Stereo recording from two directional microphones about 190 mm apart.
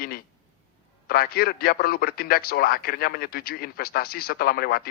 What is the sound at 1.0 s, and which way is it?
A man's voice, 50° left (ahead or behind).